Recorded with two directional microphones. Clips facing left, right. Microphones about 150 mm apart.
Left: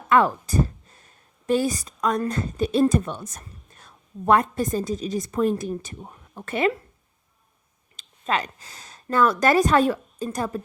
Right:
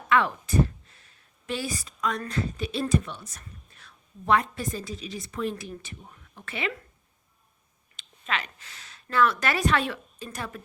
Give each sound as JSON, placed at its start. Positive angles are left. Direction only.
{"t": 0.1, "sound": "a woman's voice", "side_deg": 40}
{"t": 7.9, "sound": "speech", "side_deg": 40}